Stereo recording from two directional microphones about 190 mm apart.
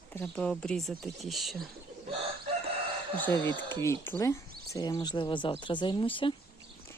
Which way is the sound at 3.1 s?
10° left (ahead or behind).